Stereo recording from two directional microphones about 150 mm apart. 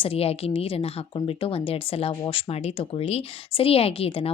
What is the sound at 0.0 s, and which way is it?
Speech, 40° left (ahead or behind).